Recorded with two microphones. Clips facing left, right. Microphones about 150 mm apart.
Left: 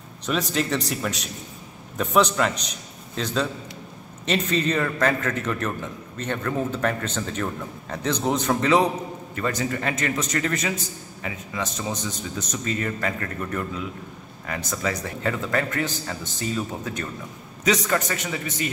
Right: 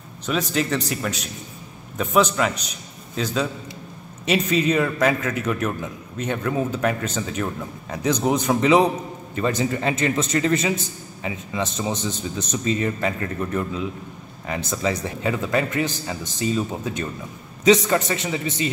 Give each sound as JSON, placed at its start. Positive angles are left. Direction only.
{"t": 0.3, "sound": "a man's voice", "side_deg": 0}
{"t": 8.0, "sound": "a man's voice", "side_deg": -15}